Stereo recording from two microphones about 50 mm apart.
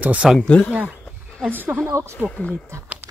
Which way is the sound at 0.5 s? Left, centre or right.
Left.